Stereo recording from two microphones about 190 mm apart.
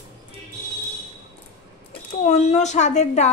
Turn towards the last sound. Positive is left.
turn(degrees=35)  # may be behind; listen again after turning